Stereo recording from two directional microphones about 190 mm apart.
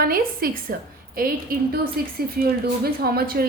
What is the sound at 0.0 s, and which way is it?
A woman's voice, 50° right (ahead or behind).